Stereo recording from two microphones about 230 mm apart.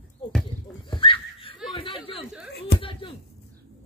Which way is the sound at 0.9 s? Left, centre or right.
Left.